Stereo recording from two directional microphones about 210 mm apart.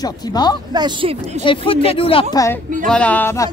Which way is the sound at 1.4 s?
25° left (ahead or behind).